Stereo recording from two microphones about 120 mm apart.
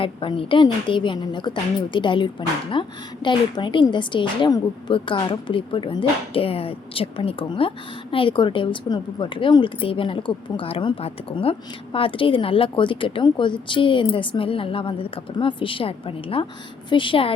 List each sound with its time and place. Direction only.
0.0 s a woman's voice: 45° left (ahead or behind)